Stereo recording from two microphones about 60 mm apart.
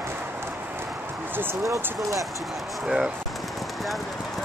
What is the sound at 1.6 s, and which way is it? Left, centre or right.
Speech, right.